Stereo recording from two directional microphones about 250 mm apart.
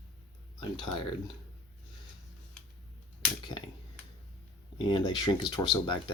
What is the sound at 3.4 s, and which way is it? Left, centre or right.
Speech, centre.